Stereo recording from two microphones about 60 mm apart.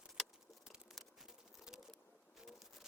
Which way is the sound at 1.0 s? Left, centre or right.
Centre.